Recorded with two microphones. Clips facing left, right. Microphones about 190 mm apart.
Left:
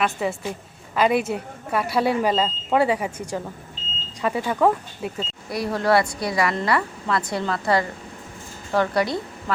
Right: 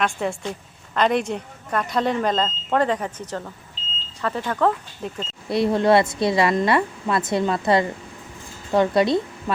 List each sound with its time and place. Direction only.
0.0 s a woman's voice: 5° left (ahead or behind)
5.5 s a woman's voice: 25° right (ahead or behind)